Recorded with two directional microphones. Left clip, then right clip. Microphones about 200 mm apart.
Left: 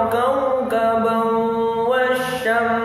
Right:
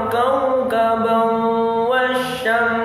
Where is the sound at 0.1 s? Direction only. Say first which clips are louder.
Right 1 dB; 5° right (ahead or behind).